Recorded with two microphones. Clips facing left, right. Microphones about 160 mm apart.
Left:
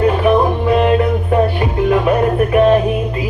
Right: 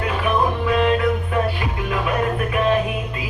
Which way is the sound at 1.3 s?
40° left (ahead or behind).